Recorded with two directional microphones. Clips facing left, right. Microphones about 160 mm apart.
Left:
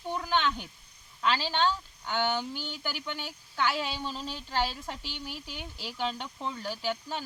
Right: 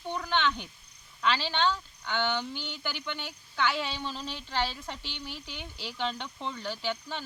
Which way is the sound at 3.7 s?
40° left (ahead or behind).